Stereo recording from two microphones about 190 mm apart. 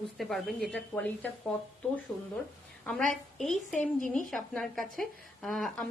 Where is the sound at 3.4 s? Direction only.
Centre (ahead or behind).